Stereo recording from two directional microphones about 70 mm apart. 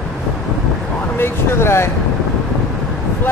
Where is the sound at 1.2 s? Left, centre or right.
Left.